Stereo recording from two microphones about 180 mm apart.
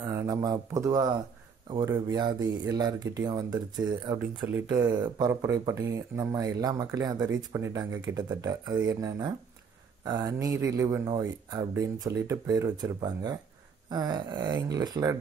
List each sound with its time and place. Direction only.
0.0 s speech: 15° right (ahead or behind)